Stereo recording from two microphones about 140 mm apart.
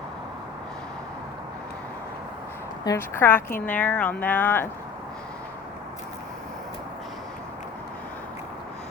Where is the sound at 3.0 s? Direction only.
15° left (ahead or behind).